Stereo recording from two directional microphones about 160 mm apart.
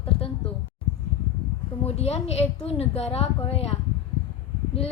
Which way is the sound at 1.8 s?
40° left (ahead or behind).